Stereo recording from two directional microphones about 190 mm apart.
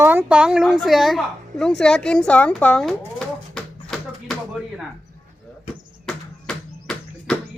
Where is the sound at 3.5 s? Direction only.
Centre (ahead or behind).